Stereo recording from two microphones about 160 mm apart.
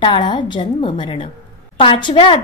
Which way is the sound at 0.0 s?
30° left (ahead or behind).